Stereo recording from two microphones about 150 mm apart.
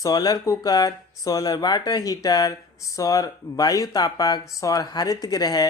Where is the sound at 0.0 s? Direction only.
25° left (ahead or behind).